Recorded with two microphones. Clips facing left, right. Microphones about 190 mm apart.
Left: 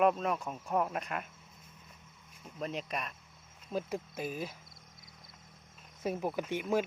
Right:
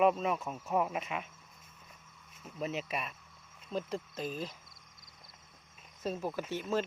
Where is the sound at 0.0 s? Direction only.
Centre (ahead or behind).